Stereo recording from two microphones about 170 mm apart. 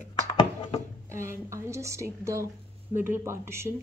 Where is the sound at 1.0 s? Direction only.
15° right (ahead or behind).